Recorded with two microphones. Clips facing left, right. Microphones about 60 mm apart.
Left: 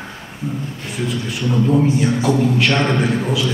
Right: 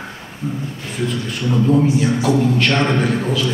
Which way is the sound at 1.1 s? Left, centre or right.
Centre.